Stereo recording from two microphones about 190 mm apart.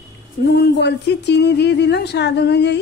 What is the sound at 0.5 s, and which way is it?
A woman's voice, 60° left (ahead or behind).